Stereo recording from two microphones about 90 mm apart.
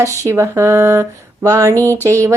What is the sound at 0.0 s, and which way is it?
A woman's voice, 35° right (ahead or behind).